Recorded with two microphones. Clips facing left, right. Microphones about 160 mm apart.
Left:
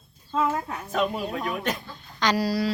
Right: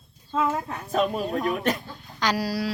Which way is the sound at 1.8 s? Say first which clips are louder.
Left 1 dB; 10° right (ahead or behind).